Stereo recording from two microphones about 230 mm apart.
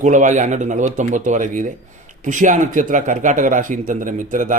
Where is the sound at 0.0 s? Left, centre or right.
Right.